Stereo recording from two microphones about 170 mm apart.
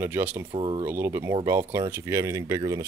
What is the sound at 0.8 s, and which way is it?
Speech, 15° right (ahead or behind).